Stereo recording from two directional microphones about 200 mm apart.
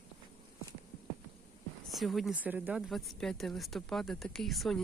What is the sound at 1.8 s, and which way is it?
Speech, centre (ahead or behind).